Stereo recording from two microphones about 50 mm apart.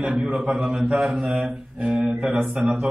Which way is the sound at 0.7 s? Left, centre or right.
Right.